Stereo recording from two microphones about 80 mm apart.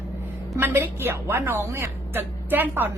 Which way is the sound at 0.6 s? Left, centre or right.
Right.